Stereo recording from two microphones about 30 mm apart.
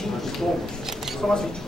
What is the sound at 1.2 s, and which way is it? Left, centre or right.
Speech, centre.